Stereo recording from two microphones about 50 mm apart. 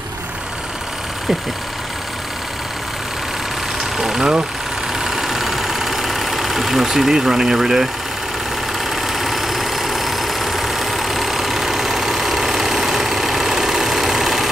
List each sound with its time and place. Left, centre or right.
4.0 s speech: centre
5.0 s engine: centre
8.9 s engine: centre